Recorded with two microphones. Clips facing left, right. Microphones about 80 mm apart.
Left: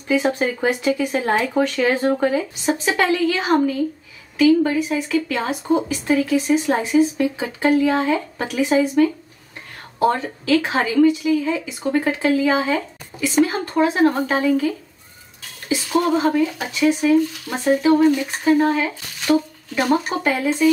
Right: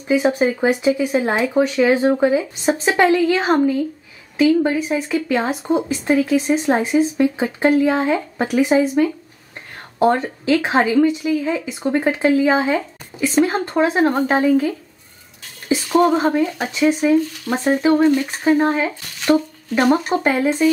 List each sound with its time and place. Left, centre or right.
0.1 s speech: centre
2.6 s a woman's voice: right
15.7 s speech: right
20.1 s a woman's voice: centre